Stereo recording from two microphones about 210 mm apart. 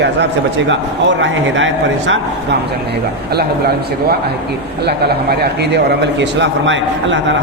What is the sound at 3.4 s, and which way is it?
A man's voice, 50° right (ahead or behind).